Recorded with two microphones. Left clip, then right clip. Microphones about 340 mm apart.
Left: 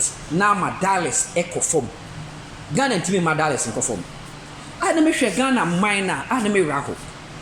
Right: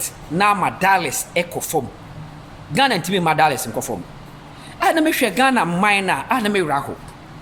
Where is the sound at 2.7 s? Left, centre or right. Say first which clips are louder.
Right 3 dB; centre.